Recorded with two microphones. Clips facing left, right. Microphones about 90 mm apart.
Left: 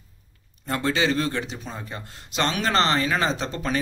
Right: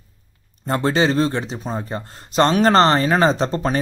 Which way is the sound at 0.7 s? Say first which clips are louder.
Right 5 dB; 35° right (ahead or behind).